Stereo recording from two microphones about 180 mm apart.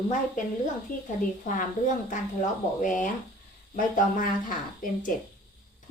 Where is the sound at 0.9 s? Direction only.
50° left (ahead or behind).